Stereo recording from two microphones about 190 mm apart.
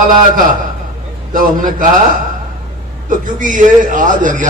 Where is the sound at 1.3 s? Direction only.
45° right (ahead or behind).